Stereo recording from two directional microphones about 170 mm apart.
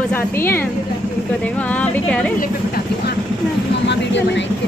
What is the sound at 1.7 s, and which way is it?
Speech, 10° left (ahead or behind).